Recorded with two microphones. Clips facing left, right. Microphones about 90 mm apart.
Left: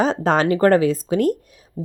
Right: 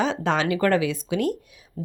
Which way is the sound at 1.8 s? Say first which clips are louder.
Left 3 dB; 20° left (ahead or behind).